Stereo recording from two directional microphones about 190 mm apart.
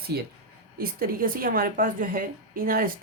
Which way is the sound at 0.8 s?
50° right (ahead or behind).